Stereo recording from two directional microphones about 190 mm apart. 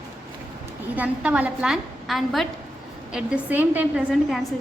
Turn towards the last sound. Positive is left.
turn(degrees=-5)  # may be behind; listen again after turning